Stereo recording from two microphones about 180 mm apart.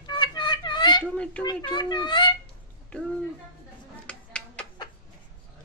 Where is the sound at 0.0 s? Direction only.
25° left (ahead or behind).